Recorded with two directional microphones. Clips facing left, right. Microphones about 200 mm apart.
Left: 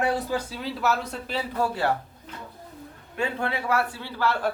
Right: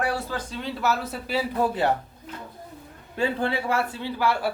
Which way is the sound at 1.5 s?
20° right (ahead or behind).